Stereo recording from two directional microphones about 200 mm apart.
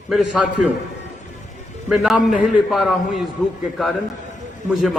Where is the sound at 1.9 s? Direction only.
Centre (ahead or behind).